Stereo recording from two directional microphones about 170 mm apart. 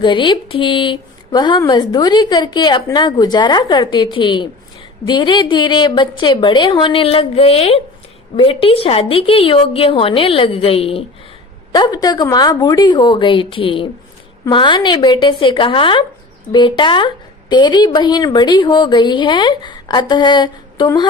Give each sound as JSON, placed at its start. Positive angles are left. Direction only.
{"t": 0.0, "sound": "a woman's voice", "side_deg": 30}
{"t": 11.7, "sound": "speech", "side_deg": 25}